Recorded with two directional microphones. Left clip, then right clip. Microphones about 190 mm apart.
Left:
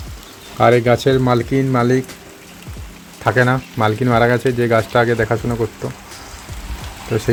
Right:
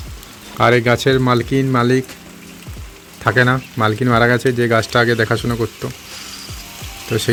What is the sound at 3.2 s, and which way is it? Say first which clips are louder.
Speech: right 1 dB; 25° right (ahead or behind).